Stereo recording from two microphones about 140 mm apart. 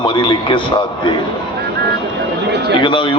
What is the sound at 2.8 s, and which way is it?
Speech, 35° left (ahead or behind).